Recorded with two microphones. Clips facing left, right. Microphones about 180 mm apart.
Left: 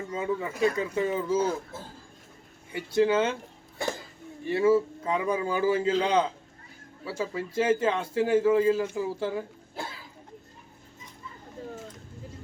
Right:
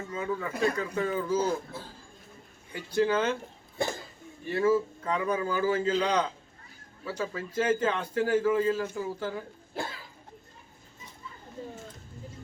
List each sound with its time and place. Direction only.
0.1 s a man's voice: 25° left (ahead or behind)
2.7 s a man's voice: 25° left (ahead or behind)
4.4 s a man's voice: 25° left (ahead or behind)